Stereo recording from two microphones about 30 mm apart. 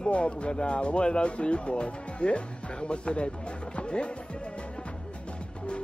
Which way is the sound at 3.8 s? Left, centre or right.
Left.